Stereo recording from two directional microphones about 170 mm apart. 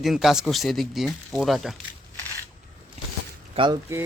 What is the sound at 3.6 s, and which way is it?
Speech, 35° right (ahead or behind).